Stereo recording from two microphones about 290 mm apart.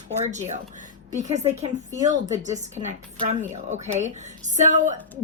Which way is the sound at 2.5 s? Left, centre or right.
Right.